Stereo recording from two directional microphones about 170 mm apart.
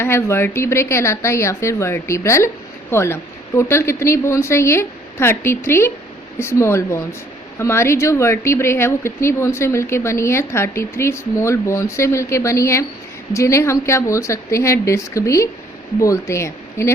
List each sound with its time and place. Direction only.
0.0 s speech: 15° left (ahead or behind)